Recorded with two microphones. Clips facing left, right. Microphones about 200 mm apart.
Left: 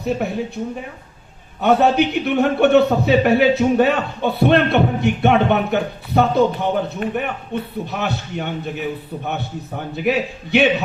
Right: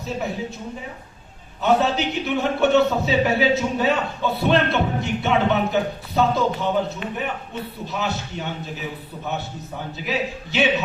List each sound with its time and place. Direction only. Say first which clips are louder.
0.0 s a man's voice: left 5 dB; 60° left (ahead or behind)
1.6 s a man's voice: left 5 dB; 60° left (ahead or behind)